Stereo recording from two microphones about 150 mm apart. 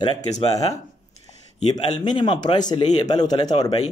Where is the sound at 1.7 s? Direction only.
30° left (ahead or behind).